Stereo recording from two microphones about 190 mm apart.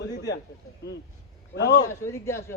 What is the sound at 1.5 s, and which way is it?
Speech, 65° left (ahead or behind).